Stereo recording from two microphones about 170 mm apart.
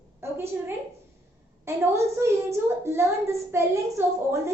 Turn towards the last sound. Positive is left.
turn(degrees=-15)  # may be behind; listen again after turning